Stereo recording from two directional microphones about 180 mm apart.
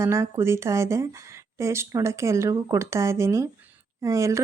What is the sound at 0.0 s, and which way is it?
Speech, 15° right (ahead or behind).